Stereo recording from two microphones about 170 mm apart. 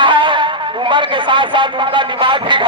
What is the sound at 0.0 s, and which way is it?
A man's voice, 30° right (ahead or behind).